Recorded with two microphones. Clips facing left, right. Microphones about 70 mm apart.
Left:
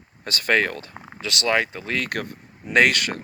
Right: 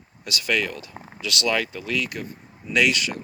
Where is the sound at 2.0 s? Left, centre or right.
Left.